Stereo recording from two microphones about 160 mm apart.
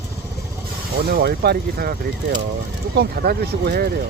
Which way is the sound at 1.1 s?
75° right (ahead or behind).